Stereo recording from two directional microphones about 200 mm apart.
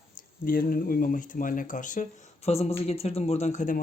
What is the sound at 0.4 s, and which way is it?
Speech, 45° left (ahead or behind).